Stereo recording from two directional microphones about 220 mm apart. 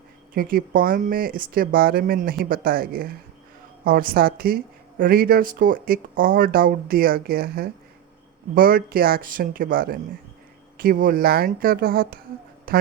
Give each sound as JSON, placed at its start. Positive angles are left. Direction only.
{"t": 0.3, "sound": "a woman's voice", "side_deg": -40}